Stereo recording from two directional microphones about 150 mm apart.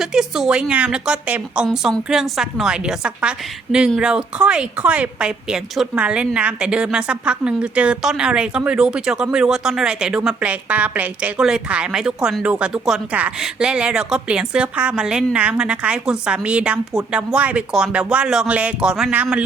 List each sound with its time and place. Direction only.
0.0 s a woman's voice: 5° right (ahead or behind)